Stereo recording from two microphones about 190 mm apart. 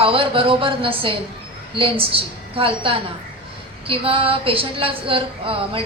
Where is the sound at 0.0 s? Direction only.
30° right (ahead or behind).